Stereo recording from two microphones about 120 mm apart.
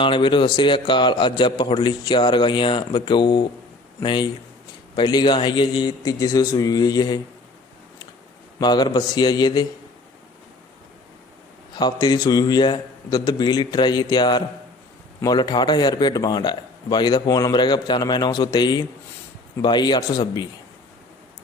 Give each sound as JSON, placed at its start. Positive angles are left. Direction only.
{"t": 0.0, "sound": "a man's voice", "side_deg": 45}
{"t": 8.5, "sound": "a man's voice", "side_deg": 35}
{"t": 11.7, "sound": "a man's voice", "side_deg": 35}